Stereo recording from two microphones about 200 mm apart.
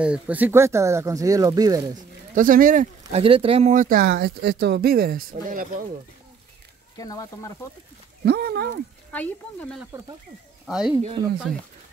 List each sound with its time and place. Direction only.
0.0 s speech: 5° right (ahead or behind)
2.3 s speech: 45° right (ahead or behind)
7.0 s speech: 20° left (ahead or behind)
8.3 s speech: 50° right (ahead or behind)
9.1 s speech: 5° left (ahead or behind)
11.2 s speech: 25° right (ahead or behind)